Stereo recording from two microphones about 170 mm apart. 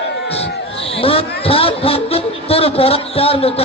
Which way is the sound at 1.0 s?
35° left (ahead or behind).